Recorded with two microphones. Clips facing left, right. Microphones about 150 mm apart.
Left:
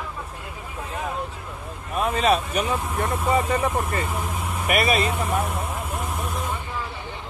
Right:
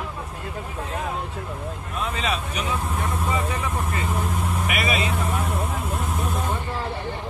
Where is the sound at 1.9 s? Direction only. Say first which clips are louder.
Left 7 dB; 50° left (ahead or behind).